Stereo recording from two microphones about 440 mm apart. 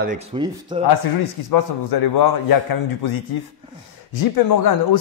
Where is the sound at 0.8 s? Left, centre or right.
Left.